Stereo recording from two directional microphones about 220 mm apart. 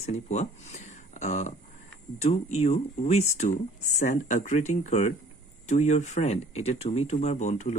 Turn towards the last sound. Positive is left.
turn(degrees=35)  # may be behind; listen again after turning